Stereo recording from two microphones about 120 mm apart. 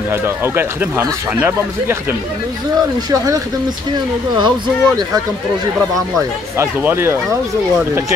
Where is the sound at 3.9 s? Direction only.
40° right (ahead or behind).